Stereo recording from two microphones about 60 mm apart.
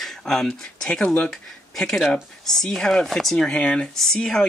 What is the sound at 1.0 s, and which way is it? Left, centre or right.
Speech, centre.